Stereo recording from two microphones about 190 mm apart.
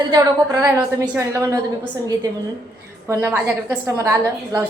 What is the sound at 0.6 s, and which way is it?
Speech, 15° right (ahead or behind).